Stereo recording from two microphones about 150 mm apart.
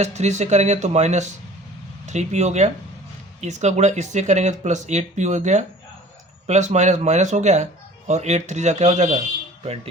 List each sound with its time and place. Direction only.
0.0 s speech: 50° right (ahead or behind)